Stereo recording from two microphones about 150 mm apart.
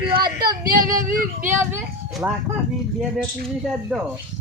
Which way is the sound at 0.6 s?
70° right (ahead or behind).